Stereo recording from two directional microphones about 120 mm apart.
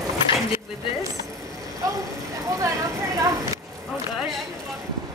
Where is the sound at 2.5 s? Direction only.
25° right (ahead or behind).